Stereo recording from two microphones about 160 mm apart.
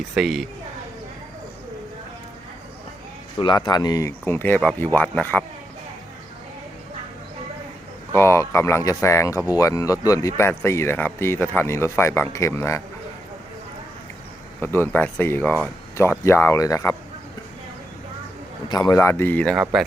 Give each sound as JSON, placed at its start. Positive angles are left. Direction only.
{"t": 0.1, "sound": "a woman's voice", "side_deg": 0}
{"t": 3.4, "sound": "speech", "side_deg": 30}
{"t": 8.1, "sound": "speech", "side_deg": 15}
{"t": 14.6, "sound": "speech", "side_deg": 15}
{"t": 18.7, "sound": "speech", "side_deg": 25}
{"t": 18.9, "sound": "speech", "side_deg": 15}